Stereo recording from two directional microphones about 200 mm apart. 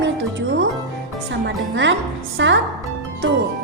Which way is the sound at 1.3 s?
65° right (ahead or behind).